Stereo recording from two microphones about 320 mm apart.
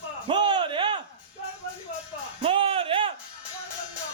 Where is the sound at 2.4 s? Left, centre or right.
Centre.